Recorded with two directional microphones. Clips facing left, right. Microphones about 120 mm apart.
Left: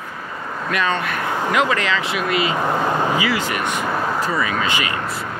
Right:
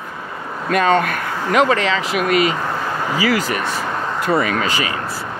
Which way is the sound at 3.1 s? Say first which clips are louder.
Right 2 dB; 40° right (ahead or behind).